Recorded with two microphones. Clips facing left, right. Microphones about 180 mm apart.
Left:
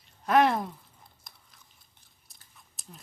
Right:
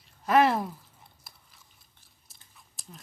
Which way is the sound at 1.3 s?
5° right (ahead or behind).